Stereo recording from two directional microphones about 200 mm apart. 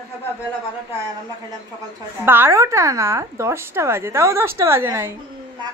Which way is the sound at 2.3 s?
10° right (ahead or behind).